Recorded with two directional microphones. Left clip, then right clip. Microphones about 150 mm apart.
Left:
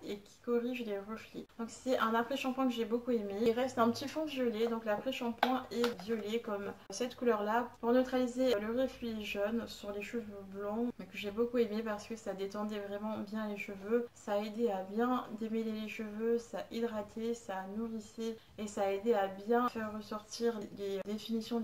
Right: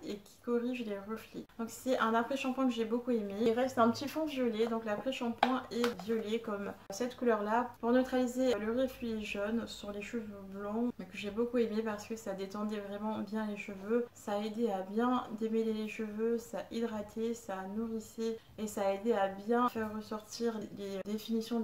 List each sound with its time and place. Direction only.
0.1 s speech: 35° right (ahead or behind)
11.1 s speech: 35° right (ahead or behind)